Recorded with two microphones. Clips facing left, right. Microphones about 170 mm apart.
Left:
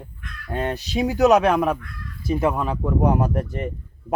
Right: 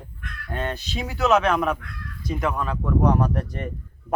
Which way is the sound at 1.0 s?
40° left (ahead or behind).